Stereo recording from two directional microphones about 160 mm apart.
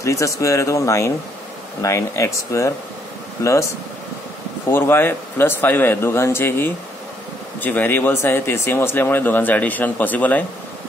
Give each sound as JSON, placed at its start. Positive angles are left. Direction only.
{"t": 0.0, "sound": "speech", "side_deg": 20}
{"t": 4.6, "sound": "speech", "side_deg": 15}